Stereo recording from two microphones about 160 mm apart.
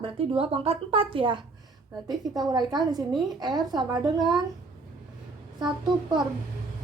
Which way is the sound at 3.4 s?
25° right (ahead or behind).